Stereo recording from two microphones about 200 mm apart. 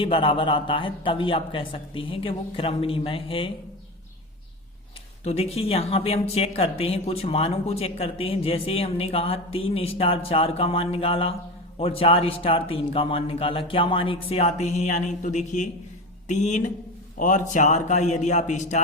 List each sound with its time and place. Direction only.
0.0 s speech: 25° left (ahead or behind)
5.2 s a man's voice: 30° left (ahead or behind)